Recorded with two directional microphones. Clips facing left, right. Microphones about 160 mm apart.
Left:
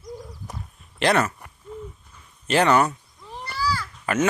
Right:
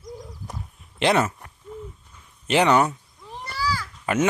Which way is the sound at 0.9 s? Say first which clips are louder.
Even; 20° right (ahead or behind).